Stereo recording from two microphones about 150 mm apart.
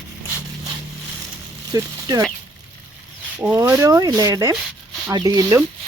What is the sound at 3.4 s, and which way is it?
Speech, 15° right (ahead or behind).